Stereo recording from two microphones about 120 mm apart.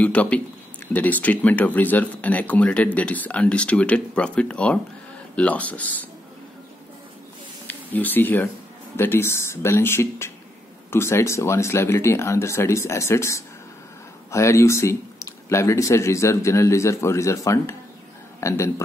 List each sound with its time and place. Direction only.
0.0 s speech: 10° left (ahead or behind)
7.6 s speech: 15° left (ahead or behind)